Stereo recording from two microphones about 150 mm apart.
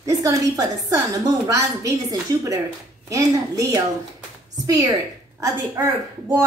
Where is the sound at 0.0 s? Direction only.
20° right (ahead or behind).